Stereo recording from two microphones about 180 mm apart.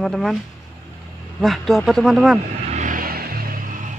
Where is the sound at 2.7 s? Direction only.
45° right (ahead or behind).